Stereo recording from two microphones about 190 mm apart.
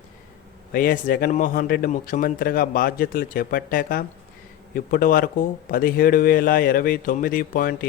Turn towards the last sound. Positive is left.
turn(degrees=50)  # may be behind; listen again after turning